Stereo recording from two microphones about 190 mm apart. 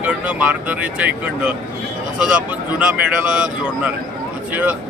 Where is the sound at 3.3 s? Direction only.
5° right (ahead or behind).